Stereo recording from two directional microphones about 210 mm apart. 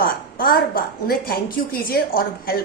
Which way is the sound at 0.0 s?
45° left (ahead or behind).